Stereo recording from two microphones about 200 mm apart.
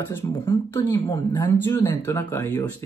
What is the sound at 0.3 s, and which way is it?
Speech, 20° left (ahead or behind).